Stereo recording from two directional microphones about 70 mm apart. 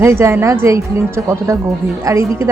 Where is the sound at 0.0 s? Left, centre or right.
Right.